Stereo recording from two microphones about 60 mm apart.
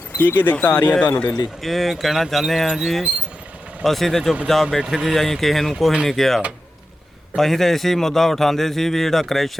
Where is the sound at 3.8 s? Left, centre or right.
Centre.